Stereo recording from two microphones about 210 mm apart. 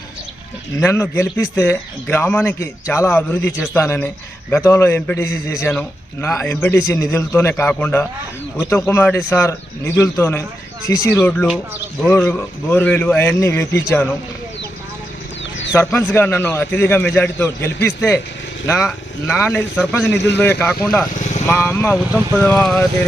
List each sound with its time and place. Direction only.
0.8 s a man's voice: 15° left (ahead or behind)
15.7 s a man's voice: 10° left (ahead or behind)
20.1 s a man's voice: 55° left (ahead or behind)
20.4 s a man's voice: 10° left (ahead or behind)
21.1 s vehicle: 35° left (ahead or behind)
21.4 s a man's voice: 15° left (ahead or behind)